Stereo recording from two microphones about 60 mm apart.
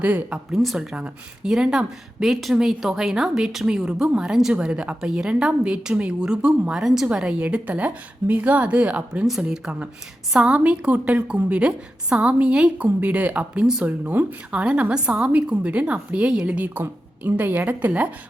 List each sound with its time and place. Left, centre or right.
0.0 s a woman's voice: right
0.5 s a woman's voice: centre; by 9.2 s right
9.2 s a woman's voice: centre; by 18.1 s right